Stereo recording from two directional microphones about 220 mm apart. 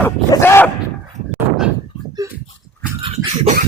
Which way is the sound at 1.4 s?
5° right (ahead or behind).